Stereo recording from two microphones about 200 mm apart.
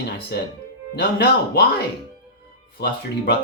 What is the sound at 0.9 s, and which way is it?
Speech, 55° left (ahead or behind).